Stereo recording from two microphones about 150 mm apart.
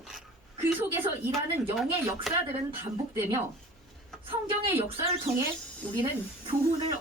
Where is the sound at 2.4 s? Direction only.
15° right (ahead or behind).